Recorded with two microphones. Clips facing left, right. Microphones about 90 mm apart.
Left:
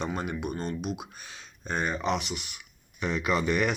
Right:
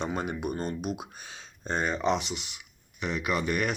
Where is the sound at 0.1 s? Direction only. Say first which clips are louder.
Right 1 dB; 30° right (ahead or behind).